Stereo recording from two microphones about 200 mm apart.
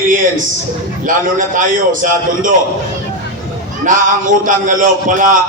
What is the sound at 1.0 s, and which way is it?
A man's voice, 40° right (ahead or behind).